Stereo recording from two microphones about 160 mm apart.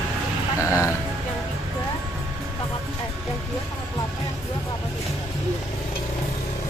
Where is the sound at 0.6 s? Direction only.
15° left (ahead or behind).